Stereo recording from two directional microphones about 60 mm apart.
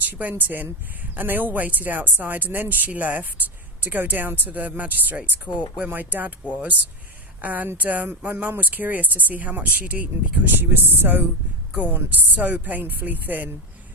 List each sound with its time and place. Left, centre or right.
0.0 s speech: right
7.4 s speech: right